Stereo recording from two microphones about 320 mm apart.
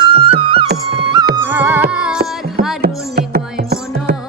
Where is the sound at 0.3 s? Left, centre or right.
Centre.